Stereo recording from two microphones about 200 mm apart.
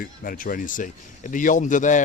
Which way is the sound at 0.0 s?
45° left (ahead or behind).